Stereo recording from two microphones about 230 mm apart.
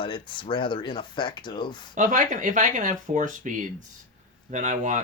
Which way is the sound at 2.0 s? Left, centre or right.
Right.